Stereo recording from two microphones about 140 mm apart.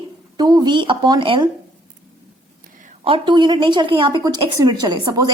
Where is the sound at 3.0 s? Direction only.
35° right (ahead or behind).